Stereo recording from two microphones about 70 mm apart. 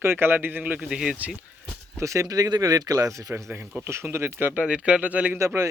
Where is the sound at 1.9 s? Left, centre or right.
Right.